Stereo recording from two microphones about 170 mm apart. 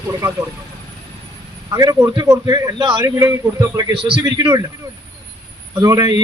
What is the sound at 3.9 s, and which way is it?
Speech, 30° right (ahead or behind).